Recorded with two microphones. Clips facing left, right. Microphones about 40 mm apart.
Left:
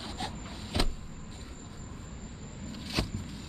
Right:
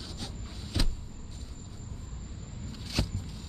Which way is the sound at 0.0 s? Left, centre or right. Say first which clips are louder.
Left 4 dB; left.